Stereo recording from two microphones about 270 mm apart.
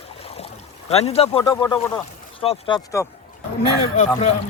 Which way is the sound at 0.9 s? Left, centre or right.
Left.